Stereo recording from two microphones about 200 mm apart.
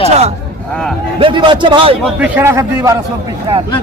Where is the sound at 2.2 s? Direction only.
10° right (ahead or behind).